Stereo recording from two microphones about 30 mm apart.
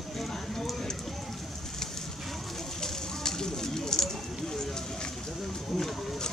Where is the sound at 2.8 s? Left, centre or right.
Centre.